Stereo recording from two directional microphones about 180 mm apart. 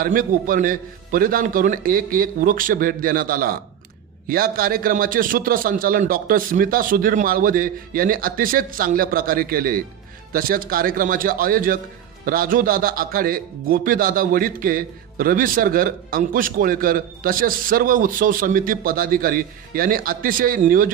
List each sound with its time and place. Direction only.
0.0 s speech: 50° right (ahead or behind)